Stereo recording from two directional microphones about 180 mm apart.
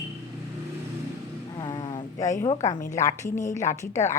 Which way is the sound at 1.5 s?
25° left (ahead or behind).